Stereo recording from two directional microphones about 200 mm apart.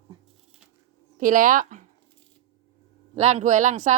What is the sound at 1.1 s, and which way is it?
Speech, 40° right (ahead or behind).